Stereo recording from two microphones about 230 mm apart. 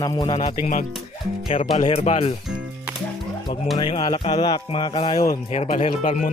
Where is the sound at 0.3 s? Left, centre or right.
Left.